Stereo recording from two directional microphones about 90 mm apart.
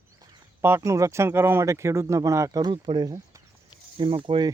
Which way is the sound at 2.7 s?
65° right (ahead or behind).